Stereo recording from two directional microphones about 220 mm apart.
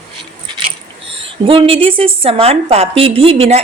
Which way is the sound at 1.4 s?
25° right (ahead or behind).